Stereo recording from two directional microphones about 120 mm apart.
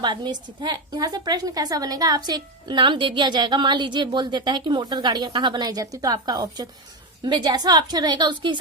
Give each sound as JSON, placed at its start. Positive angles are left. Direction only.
{"t": 0.0, "sound": "a woman's voice", "side_deg": -40}